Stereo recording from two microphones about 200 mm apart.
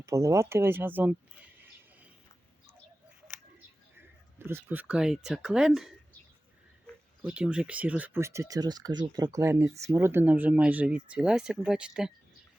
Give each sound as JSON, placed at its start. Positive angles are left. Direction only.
{"t": 0.0, "sound": "speech", "side_deg": -15}
{"t": 3.9, "sound": "speech", "side_deg": -10}
{"t": 7.2, "sound": "speech", "side_deg": -5}